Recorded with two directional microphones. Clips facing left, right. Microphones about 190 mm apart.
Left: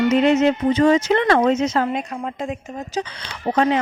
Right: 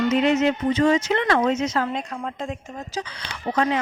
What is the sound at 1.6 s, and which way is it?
Speech, 30° left (ahead or behind).